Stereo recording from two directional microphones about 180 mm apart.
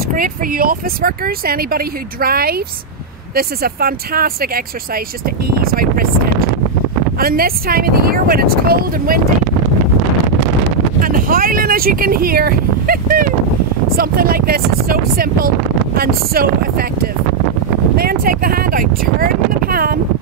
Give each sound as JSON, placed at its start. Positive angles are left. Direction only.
{"t": 0.1, "sound": "speech", "side_deg": -50}
{"t": 7.2, "sound": "speech", "side_deg": -55}
{"t": 11.0, "sound": "a sound", "side_deg": -50}
{"t": 13.9, "sound": "speech", "side_deg": -55}